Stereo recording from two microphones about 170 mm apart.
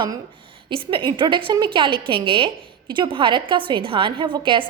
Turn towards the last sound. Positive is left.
turn(degrees=-30)  # may be behind; listen again after turning